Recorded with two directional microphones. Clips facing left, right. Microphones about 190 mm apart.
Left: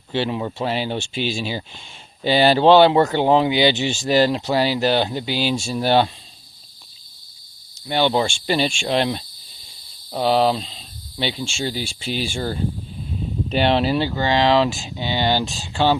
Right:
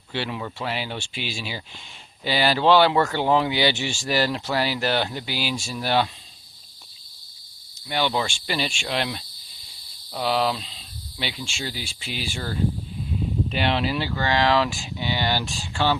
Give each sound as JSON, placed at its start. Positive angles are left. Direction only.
{"t": 0.1, "sound": "speech", "side_deg": 25}
{"t": 7.9, "sound": "speech", "side_deg": 30}